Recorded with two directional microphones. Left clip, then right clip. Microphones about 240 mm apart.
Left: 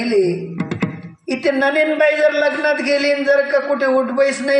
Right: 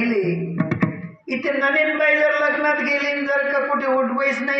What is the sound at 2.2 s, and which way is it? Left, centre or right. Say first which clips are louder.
A man's voice: left 3 dB; right.